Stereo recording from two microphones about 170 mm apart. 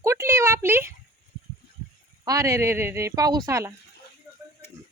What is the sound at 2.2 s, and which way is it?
Speech, 20° right (ahead or behind).